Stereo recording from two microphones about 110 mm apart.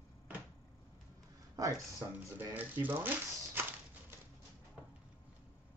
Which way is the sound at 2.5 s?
15° right (ahead or behind).